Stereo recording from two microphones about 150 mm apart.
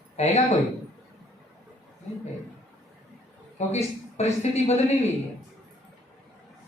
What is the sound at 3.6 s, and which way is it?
Speech, 45° left (ahead or behind).